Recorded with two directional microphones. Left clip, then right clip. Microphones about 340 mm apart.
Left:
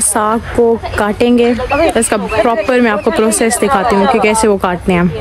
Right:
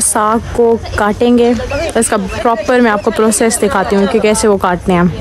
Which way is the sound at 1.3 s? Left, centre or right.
Centre.